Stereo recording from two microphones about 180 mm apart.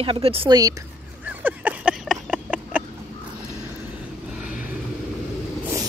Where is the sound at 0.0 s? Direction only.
30° right (ahead or behind).